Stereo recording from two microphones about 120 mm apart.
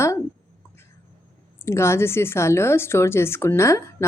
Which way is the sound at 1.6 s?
20° left (ahead or behind).